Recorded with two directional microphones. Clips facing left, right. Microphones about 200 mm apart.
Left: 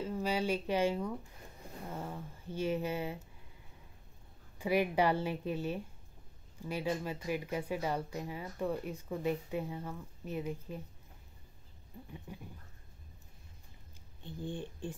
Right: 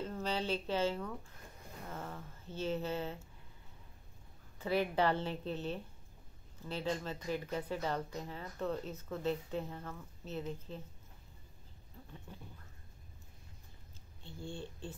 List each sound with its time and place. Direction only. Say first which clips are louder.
0.0 s speech: left 3 dB; 10° left (ahead or behind)
4.6 s speech: left 3 dB; 10° left (ahead or behind)
11.9 s speech: left 5 dB; 15° left (ahead or behind)
14.2 s speech: left 4 dB; 15° left (ahead or behind)